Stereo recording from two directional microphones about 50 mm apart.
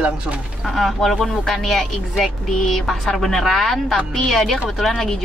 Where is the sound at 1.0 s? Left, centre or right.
Centre.